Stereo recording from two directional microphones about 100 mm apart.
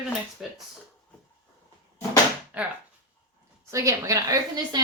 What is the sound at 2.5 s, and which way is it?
Speech, 15° right (ahead or behind).